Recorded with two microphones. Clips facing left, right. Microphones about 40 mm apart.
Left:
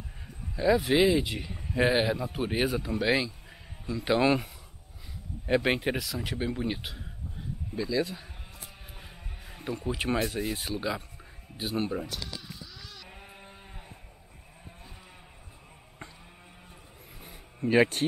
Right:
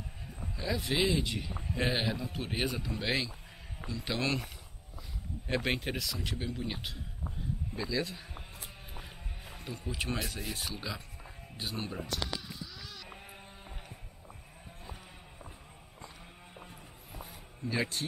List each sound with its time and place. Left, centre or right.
0.6 s speech: centre
3.9 s speech: centre
5.5 s speech: centre
7.7 s speech: centre
9.7 s speech: centre
12.2 s a sound: centre
17.2 s a sound: left